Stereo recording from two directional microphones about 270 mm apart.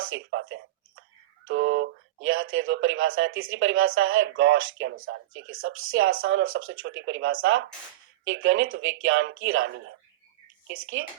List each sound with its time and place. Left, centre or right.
0.0 s speech: right